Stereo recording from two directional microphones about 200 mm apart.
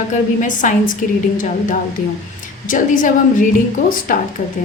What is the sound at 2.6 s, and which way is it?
A woman's voice, 40° left (ahead or behind).